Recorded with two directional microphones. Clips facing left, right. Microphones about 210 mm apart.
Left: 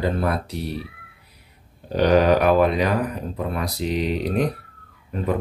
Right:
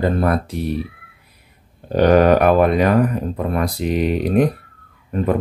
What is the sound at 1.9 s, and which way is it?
Speech, 55° right (ahead or behind).